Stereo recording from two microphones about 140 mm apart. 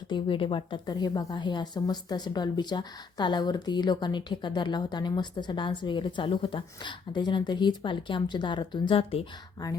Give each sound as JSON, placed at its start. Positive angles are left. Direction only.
{"t": 0.1, "sound": "a woman's voice", "side_deg": 40}